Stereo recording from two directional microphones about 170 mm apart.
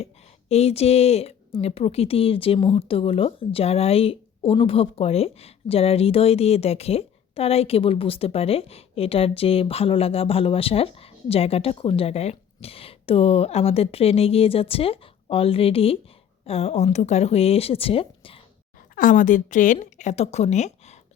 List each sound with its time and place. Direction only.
0.0 s speech: 40° left (ahead or behind)
18.9 s speech: 50° left (ahead or behind)